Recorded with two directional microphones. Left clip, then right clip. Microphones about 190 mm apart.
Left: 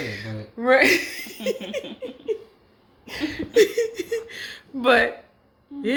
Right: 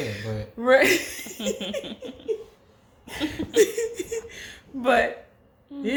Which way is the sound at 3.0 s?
15° left (ahead or behind).